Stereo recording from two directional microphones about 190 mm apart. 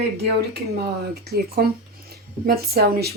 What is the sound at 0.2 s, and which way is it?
A woman's voice, 60° right (ahead or behind).